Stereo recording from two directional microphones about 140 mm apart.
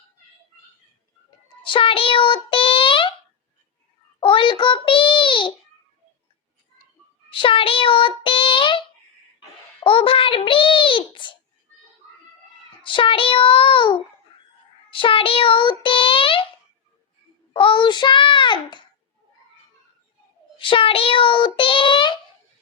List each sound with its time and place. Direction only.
1.6 s a sound: 40° left (ahead or behind)
4.2 s child singing: 35° left (ahead or behind)
7.3 s child singing: 35° left (ahead or behind)
9.8 s a child's voice: 40° left (ahead or behind)
12.8 s a child's voice: 35° left (ahead or behind)
17.5 s a child's voice: 35° left (ahead or behind)
20.6 s a child's voice: 40° left (ahead or behind)